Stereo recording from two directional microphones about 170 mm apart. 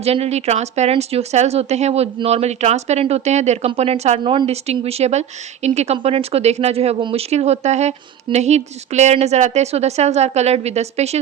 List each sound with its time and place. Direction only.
0.0 s a woman's voice: 40° right (ahead or behind)